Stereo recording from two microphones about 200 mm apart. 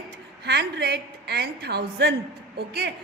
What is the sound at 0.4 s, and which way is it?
A woman's voice, 55° right (ahead or behind).